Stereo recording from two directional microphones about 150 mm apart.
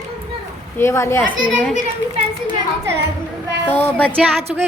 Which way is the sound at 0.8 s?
15° left (ahead or behind).